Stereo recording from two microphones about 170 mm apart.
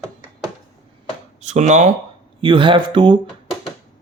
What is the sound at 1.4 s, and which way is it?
Speech, 45° right (ahead or behind).